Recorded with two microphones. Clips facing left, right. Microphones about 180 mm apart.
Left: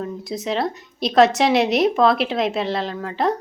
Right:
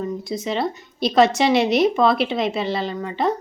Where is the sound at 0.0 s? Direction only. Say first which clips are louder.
Right 1 dB; centre (ahead or behind).